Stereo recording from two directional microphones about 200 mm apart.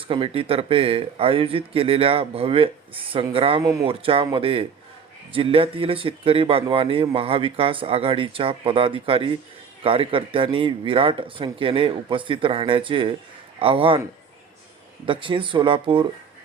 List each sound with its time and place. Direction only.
0.1 s speech: 25° right (ahead or behind)
15.0 s speech: 25° right (ahead or behind)